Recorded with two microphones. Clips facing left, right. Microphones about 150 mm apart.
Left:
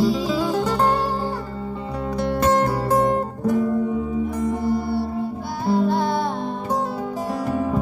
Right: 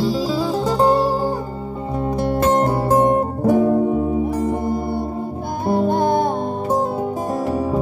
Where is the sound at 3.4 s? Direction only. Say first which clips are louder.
Right 6 dB; 70° right (ahead or behind).